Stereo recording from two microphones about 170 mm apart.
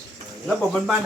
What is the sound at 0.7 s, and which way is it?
Speech, centre (ahead or behind).